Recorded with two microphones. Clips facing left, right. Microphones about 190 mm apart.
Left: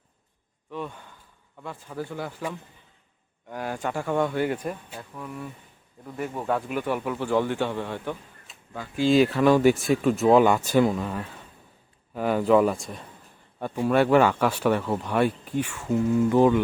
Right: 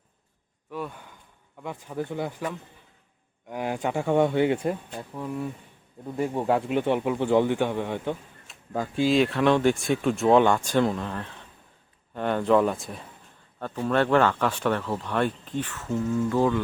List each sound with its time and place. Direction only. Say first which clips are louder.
0.7 s speech: even; 5° right (ahead or behind)
3.5 s speech: right 2 dB; 15° right (ahead or behind)
8.5 s a sound: even; centre (ahead or behind)
9.0 s speech: left 3 dB; centre (ahead or behind)
13.6 s speech: left 2 dB; 10° left (ahead or behind)